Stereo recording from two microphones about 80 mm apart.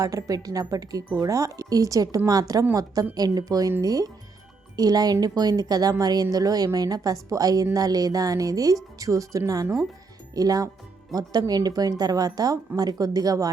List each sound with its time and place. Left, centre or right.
0.0 s a woman's voice: right